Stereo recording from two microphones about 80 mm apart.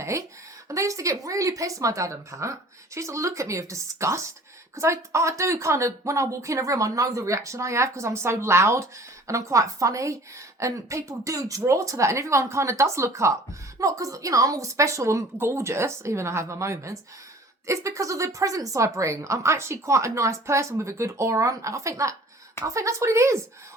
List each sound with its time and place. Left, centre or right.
0.0 s a woman's voice: right